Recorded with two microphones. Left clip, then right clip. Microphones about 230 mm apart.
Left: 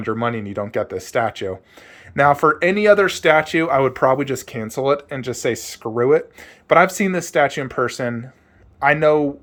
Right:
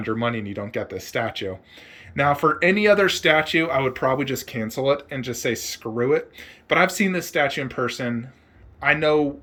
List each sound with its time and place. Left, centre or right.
0.0 s speech: centre